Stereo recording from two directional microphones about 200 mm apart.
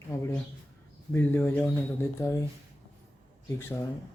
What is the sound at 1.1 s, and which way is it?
Speech, 10° left (ahead or behind).